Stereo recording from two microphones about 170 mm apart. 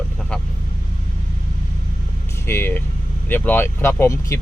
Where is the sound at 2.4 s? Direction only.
15° left (ahead or behind).